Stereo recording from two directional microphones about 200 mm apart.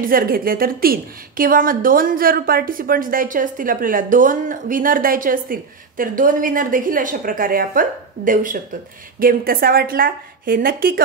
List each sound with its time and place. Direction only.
0.0 s a woman's voice: 45° right (ahead or behind)